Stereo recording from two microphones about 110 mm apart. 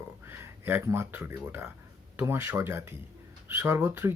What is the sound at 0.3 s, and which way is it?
Speech, 20° right (ahead or behind).